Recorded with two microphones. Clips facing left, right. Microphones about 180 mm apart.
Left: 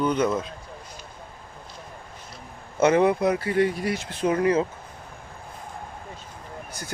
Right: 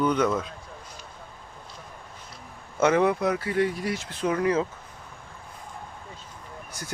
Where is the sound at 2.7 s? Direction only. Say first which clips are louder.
Left 2 dB; 10° left (ahead or behind).